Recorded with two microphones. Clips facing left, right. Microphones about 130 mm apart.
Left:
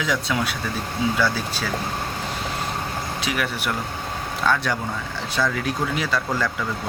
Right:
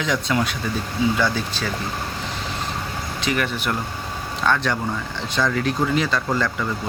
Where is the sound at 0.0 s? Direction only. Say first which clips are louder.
Right 2 dB; 5° left (ahead or behind).